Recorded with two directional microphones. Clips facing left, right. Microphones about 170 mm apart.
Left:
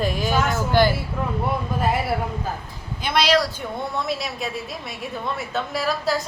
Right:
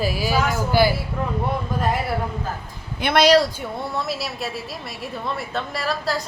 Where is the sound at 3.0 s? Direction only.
65° right (ahead or behind).